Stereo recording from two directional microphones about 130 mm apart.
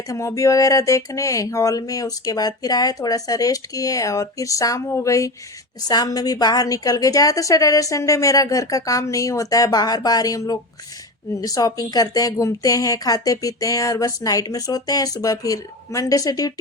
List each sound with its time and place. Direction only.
0.1 s speech: 25° left (ahead or behind)